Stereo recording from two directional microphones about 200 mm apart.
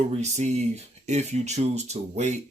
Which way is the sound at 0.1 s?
35° right (ahead or behind).